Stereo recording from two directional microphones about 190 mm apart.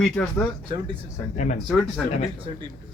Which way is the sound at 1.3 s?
40° left (ahead or behind).